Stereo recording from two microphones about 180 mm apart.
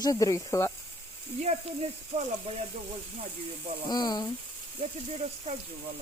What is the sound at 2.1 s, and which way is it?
Speech, 40° right (ahead or behind).